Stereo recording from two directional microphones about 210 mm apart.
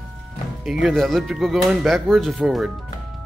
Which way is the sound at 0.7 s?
Centre (ahead or behind).